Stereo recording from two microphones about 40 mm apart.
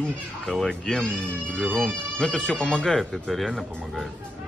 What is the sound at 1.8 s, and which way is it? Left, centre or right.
Speech, centre.